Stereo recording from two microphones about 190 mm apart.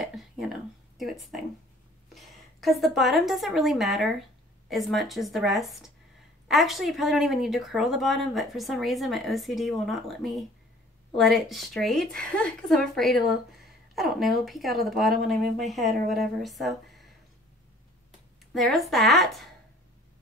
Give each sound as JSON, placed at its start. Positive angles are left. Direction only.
{"t": 0.0, "sound": "a sound", "side_deg": 0}
{"t": 2.1, "sound": "a woman's voice", "side_deg": 0}
{"t": 18.5, "sound": "speech", "side_deg": 0}